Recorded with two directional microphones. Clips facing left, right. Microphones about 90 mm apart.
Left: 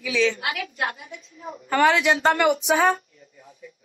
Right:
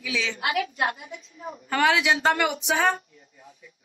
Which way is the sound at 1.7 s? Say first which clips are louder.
Left 3 dB; centre (ahead or behind).